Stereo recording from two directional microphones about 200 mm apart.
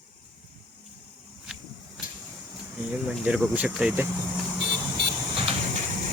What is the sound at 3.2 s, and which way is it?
Speech, 5° right (ahead or behind).